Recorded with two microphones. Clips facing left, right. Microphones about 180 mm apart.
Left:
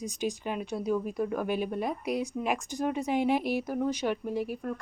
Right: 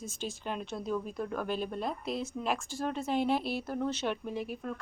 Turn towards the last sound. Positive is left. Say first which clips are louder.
# left 4 dB
turn(degrees=10)  # may be behind; listen again after turning